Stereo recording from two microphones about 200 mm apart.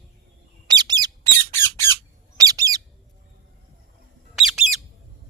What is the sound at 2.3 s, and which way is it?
Bird, 20° right (ahead or behind).